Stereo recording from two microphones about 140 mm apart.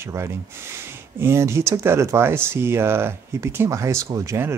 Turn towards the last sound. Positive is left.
turn(degrees=-20)  # may be behind; listen again after turning